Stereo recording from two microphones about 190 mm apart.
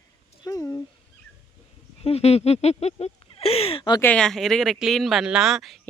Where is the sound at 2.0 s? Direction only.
30° left (ahead or behind).